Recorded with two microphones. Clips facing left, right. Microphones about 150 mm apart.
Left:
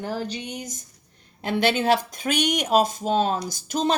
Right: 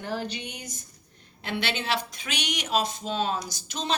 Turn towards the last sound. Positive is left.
turn(degrees=45)  # may be behind; listen again after turning